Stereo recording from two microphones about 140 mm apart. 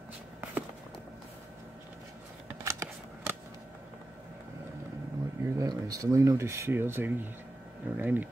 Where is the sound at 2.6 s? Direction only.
20° right (ahead or behind).